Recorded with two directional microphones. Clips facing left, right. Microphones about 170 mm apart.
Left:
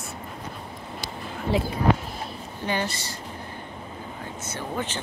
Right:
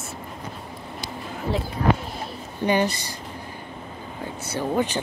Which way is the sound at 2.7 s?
15° right (ahead or behind).